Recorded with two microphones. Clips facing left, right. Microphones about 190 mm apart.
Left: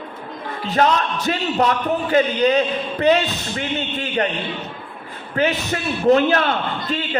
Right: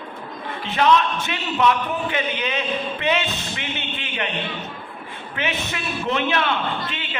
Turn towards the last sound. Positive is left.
turn(degrees=40)  # may be behind; listen again after turning